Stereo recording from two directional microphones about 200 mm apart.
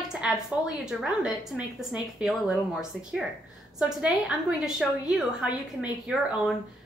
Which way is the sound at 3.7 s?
5° right (ahead or behind).